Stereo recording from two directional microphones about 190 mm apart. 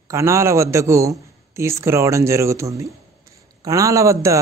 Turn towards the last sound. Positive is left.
turn(degrees=-15)  # may be behind; listen again after turning